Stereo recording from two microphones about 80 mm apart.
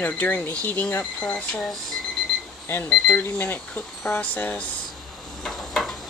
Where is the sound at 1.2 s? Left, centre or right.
Centre.